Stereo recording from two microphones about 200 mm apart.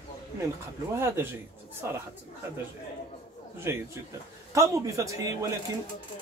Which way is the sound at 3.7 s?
10° right (ahead or behind).